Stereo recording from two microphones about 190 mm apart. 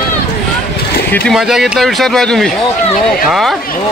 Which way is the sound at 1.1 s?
Centre (ahead or behind).